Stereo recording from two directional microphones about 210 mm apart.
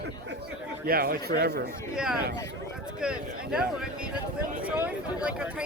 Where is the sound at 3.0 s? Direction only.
5° right (ahead or behind).